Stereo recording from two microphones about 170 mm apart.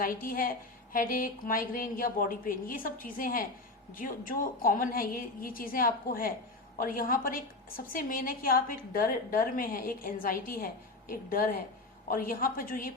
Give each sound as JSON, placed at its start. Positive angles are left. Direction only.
{"t": 0.0, "sound": "a woman's voice", "side_deg": 55}